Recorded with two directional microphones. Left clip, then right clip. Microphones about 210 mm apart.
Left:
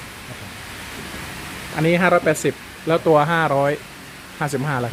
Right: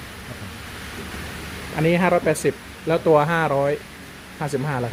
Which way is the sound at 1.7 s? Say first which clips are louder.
Left 2 dB; 5° left (ahead or behind).